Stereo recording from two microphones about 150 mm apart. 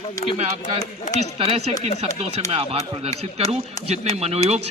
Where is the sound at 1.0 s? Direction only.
50° left (ahead or behind).